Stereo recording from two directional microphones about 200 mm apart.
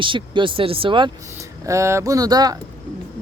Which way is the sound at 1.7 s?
15° right (ahead or behind).